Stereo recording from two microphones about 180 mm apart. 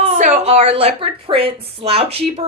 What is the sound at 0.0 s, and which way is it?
Speech, 40° right (ahead or behind).